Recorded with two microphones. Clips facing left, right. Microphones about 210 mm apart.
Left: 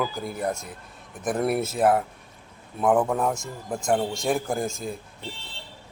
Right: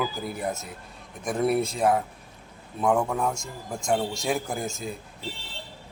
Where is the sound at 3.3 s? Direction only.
20° left (ahead or behind).